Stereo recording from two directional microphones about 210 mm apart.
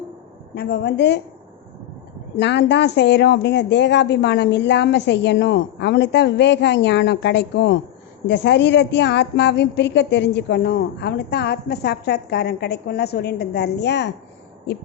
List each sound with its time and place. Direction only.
0.5 s a woman's voice: 50° left (ahead or behind)
2.4 s a woman's voice: 55° left (ahead or behind)